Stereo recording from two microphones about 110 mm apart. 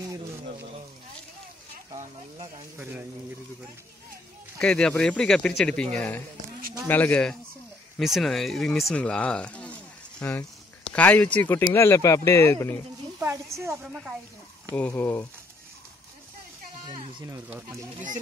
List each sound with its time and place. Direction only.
2.0 s a sound: 85° right
2.8 s a woman's voice: 20° right (ahead or behind)
4.6 s speech: 5° left (ahead or behind)
8.0 s speech: centre (ahead or behind); by 12.8 s 20° left (ahead or behind)
13.2 s a woman's voice: 25° right (ahead or behind)
14.8 s speech: 15° left (ahead or behind)